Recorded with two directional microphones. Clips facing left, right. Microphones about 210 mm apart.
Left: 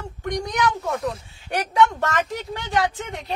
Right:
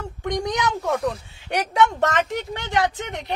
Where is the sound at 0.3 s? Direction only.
20° right (ahead or behind).